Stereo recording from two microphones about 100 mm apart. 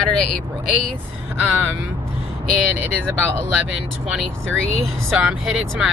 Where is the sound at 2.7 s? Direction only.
20° right (ahead or behind).